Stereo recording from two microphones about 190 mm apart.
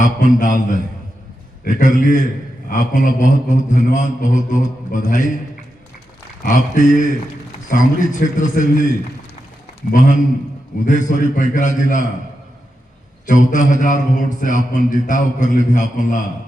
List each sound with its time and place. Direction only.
0.3 s a man's voice: 45° left (ahead or behind)
6.4 s a man's voice: 45° left (ahead or behind)
9.9 s a man's voice: 40° left (ahead or behind)
13.2 s a man's voice: 40° left (ahead or behind)